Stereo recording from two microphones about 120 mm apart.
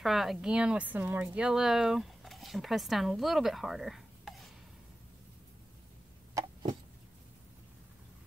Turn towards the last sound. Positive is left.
turn(degrees=-25)  # may be behind; listen again after turning